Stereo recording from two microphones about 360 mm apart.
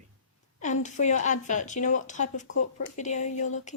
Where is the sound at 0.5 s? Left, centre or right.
Centre.